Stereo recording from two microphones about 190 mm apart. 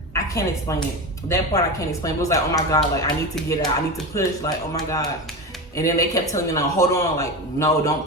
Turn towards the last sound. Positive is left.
turn(degrees=15)  # may be behind; listen again after turning